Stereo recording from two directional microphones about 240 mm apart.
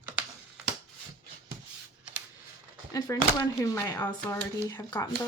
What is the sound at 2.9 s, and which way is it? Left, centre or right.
Speech, centre.